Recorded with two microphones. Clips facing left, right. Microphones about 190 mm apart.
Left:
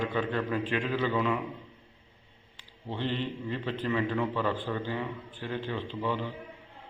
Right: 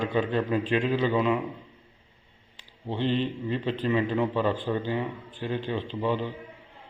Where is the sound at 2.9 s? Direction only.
20° right (ahead or behind).